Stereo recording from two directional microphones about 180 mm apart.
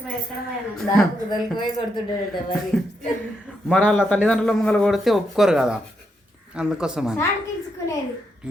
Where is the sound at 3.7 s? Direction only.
10° left (ahead or behind).